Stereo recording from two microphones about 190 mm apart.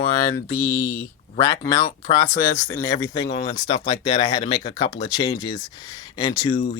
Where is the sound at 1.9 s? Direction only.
30° left (ahead or behind).